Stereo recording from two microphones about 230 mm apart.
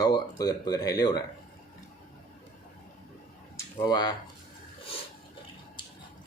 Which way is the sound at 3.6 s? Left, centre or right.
Centre.